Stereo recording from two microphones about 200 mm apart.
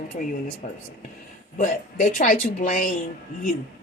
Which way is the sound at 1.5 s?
40° left (ahead or behind).